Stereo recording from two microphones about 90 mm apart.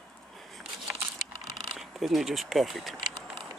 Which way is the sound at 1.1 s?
60° right (ahead or behind).